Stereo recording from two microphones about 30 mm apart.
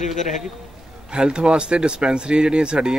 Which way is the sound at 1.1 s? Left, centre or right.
Right.